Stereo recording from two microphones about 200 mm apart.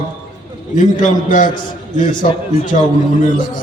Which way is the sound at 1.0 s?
40° left (ahead or behind).